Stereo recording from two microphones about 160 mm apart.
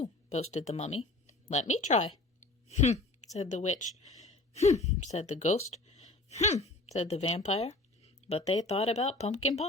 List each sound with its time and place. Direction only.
0.0 s speech: 45° left (ahead or behind)